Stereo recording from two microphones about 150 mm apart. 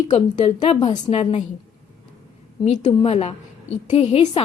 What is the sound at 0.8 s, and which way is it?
Speech, 30° left (ahead or behind).